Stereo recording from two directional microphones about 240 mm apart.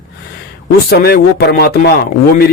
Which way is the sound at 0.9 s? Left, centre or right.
Left.